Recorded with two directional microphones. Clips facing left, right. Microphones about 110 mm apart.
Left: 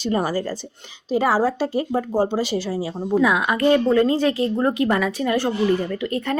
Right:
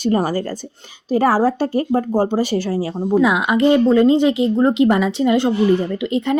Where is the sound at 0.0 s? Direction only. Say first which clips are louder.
Right 4 dB; 50° right (ahead or behind).